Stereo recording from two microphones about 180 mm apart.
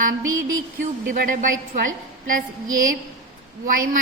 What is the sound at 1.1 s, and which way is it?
Speech, 50° right (ahead or behind).